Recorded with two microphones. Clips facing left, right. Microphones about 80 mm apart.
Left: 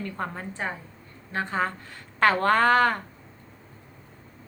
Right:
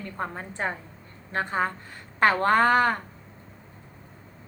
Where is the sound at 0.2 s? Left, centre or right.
Right.